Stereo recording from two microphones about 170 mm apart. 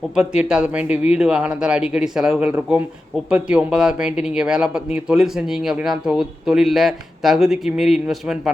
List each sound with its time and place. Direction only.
0.2 s speech: 5° right (ahead or behind)